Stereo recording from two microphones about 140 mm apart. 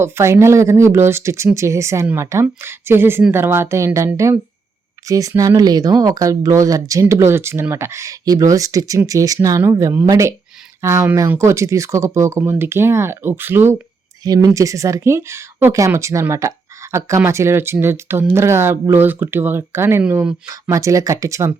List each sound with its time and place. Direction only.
0.0 s speech: 20° right (ahead or behind)